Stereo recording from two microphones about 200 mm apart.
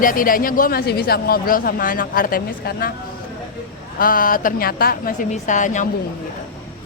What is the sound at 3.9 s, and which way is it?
Speech, 45° left (ahead or behind).